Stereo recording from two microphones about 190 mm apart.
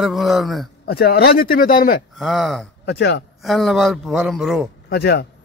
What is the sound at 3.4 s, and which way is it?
A woman's voice, centre (ahead or behind).